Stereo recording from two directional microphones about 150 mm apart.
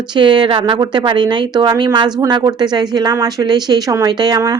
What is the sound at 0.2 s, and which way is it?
A woman's voice, 30° right (ahead or behind).